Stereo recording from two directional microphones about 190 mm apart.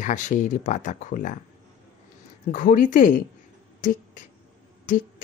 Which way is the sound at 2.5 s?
45° left (ahead or behind).